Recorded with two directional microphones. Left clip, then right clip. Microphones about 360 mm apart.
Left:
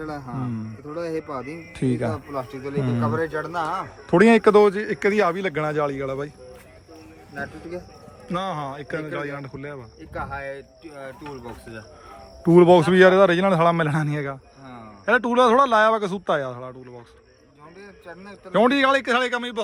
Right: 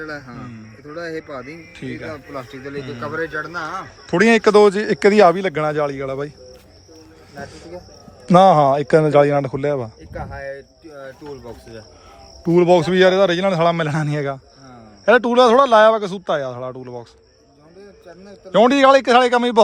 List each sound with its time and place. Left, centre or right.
0.3 s a man's voice: centre
4.1 s a man's voice: centre
8.3 s speech: centre
10.2 s speech: left
12.5 s a man's voice: centre
18.5 s speech: centre